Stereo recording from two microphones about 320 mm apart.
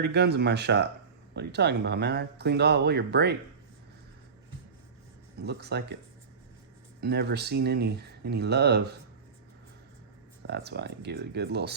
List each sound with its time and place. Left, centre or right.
0.0 s speech: right
5.4 s speech: right
7.0 s speech: right
10.4 s speech: right